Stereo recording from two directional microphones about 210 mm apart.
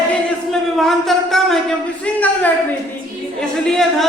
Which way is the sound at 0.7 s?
Centre (ahead or behind).